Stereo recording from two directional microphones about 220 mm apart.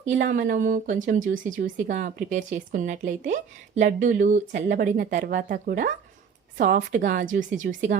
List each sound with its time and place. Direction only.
0.3 s speech: 40° right (ahead or behind)